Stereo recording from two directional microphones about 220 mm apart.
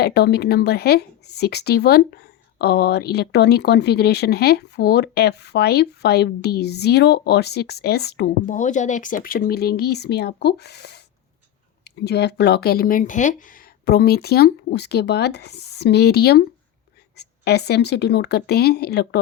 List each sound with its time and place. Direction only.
0.0 s speech: 50° left (ahead or behind)